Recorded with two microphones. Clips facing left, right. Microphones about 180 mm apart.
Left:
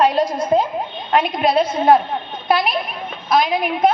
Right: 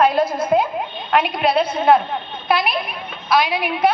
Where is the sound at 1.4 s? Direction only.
40° left (ahead or behind).